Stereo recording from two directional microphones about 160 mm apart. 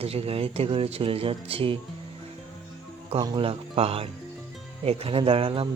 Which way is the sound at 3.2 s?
30° right (ahead or behind).